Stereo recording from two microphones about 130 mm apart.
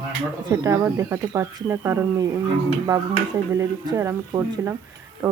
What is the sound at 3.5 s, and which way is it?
Speech, 20° right (ahead or behind).